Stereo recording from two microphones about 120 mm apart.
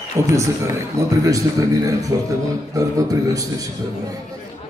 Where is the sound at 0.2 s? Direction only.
25° right (ahead or behind).